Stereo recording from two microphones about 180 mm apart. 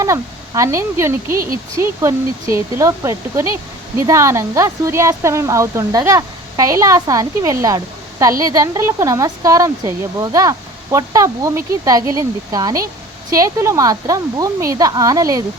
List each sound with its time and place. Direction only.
0.0 s speech: 15° right (ahead or behind)